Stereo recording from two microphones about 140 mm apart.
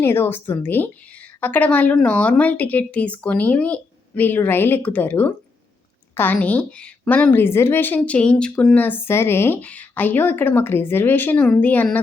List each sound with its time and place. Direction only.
0.0 s a woman's voice: 15° left (ahead or behind)